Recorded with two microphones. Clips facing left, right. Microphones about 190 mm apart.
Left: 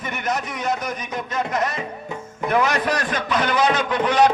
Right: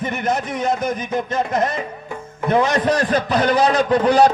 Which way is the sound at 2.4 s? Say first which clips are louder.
Right 4 dB; 30° right (ahead or behind).